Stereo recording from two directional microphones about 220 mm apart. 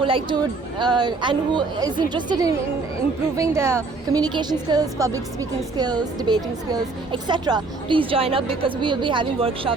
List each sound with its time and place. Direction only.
0.0 s a woman's voice: 20° right (ahead or behind)